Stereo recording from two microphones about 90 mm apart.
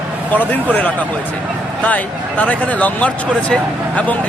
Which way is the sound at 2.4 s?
15° left (ahead or behind).